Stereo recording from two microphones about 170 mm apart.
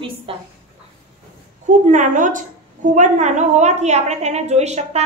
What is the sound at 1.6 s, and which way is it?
A woman's voice, 45° right (ahead or behind).